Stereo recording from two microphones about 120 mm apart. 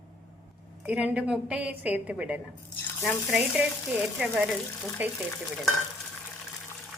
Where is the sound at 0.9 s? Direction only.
10° right (ahead or behind).